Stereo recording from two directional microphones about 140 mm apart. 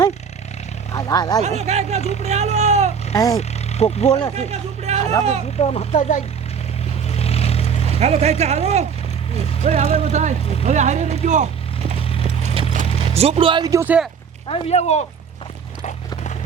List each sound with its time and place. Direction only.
0.9 s a sound: 30° left (ahead or behind)
1.4 s speech: 50° right (ahead or behind)
3.2 s speech: 25° left (ahead or behind)
3.7 s speech: 50° left (ahead or behind)
4.4 s a sound: 50° right (ahead or behind)
5.5 s speech: 50° left (ahead or behind)
7.1 s vehicle: 45° left (ahead or behind)
7.9 s speech: 50° right (ahead or behind)
12.2 s a sound: 50° right (ahead or behind)
13.1 s speech: 45° right (ahead or behind)
13.7 s speech: 20° right (ahead or behind)
14.4 s speech: 45° left (ahead or behind)